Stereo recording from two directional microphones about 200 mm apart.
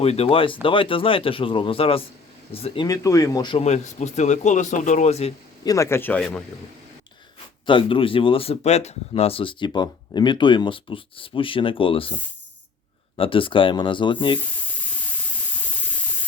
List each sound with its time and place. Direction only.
0.0 s speech: 30° left (ahead or behind)
2.8 s speech: 15° left (ahead or behind)
3.6 s speech: 35° left (ahead or behind)
5.6 s speech: 15° left (ahead or behind)
7.7 s speech: 25° left (ahead or behind)
13.1 s speech: 25° left (ahead or behind)